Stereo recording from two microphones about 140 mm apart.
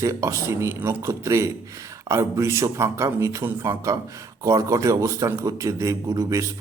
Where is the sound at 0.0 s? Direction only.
20° right (ahead or behind).